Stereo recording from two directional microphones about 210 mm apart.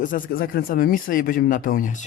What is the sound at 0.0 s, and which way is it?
Speech, 40° left (ahead or behind).